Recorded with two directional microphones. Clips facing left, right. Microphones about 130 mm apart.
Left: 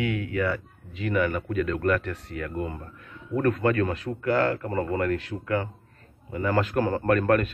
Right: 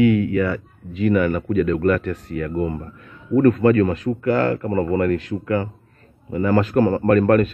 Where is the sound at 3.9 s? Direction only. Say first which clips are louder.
Right 6 dB; 15° right (ahead or behind).